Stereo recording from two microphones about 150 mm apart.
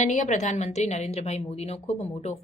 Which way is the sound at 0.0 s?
55° left (ahead or behind).